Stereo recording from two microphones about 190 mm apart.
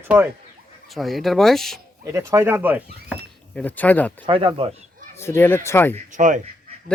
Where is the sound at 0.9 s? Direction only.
Centre (ahead or behind).